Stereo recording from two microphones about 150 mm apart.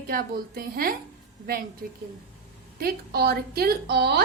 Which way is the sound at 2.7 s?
90° right.